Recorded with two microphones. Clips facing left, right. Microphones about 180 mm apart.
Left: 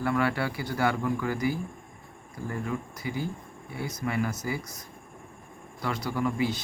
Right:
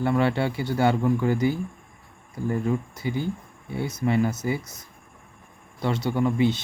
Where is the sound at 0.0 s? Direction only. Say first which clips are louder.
Right 4 dB; 25° right (ahead or behind).